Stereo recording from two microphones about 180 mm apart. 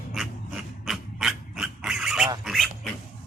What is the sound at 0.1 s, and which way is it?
Dog, centre (ahead or behind).